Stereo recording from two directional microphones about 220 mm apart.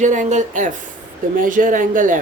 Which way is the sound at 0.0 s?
35° right (ahead or behind).